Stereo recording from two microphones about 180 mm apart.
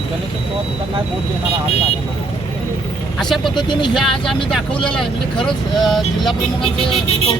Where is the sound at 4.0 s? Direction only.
Centre (ahead or behind).